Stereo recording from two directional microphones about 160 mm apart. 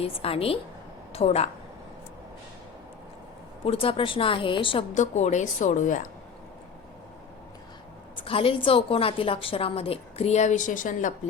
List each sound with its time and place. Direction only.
0.0 s a woman's voice: 35° left (ahead or behind)
3.6 s a woman's voice: 35° left (ahead or behind)
4.9 s a woman's voice: 45° left (ahead or behind)
8.1 s a woman's voice: 35° left (ahead or behind); by 11.1 s 55° left (ahead or behind)